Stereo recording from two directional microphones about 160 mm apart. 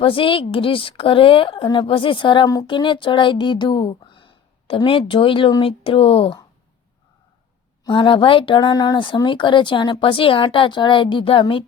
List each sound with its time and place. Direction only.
0.0 s speech: 35° left (ahead or behind)
7.9 s speech: 30° left (ahead or behind)